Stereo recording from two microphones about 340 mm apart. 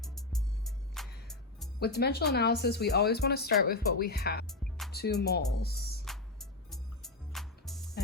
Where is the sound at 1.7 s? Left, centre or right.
Left.